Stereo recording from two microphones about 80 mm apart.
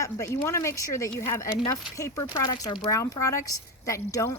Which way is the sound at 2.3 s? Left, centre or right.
Left.